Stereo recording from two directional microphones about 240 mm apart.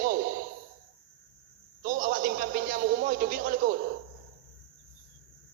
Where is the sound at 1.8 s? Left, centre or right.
Right.